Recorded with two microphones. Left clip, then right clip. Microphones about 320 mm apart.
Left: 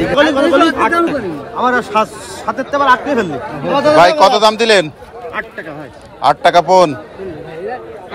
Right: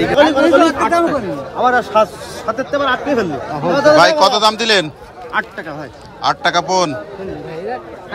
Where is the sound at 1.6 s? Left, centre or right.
Centre.